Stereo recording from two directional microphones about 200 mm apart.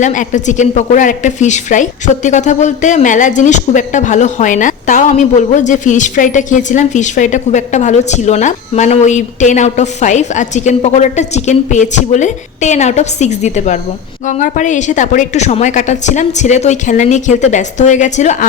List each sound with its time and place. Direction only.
0.0 s speech: 40° left (ahead or behind)